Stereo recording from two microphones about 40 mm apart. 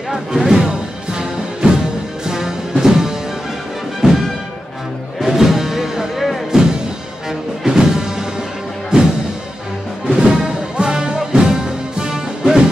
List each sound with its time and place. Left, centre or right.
0.1 s music: centre
10.2 s music: right